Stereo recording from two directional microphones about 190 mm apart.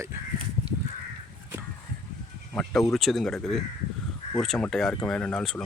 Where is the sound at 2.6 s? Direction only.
Centre (ahead or behind).